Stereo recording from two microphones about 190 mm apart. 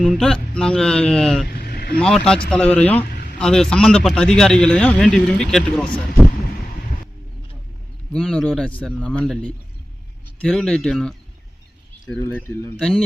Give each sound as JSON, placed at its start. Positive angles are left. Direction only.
{"t": 0.0, "sound": "a man's voice", "side_deg": 0}
{"t": 1.5, "sound": "vehicle", "side_deg": 55}
{"t": 2.0, "sound": "a man's voice", "side_deg": 5}
{"t": 8.1, "sound": "a man's voice", "side_deg": 5}
{"t": 12.2, "sound": "speech", "side_deg": 10}
{"t": 12.7, "sound": "a man's voice", "side_deg": 0}